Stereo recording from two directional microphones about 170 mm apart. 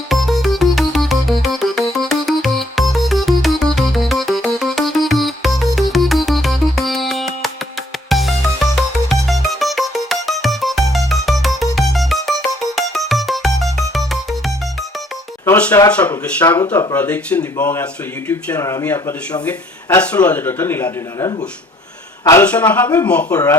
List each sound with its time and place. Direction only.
0.1 s music: centre (ahead or behind)
15.4 s a sound: 10° left (ahead or behind)
15.9 s speech: 10° left (ahead or behind)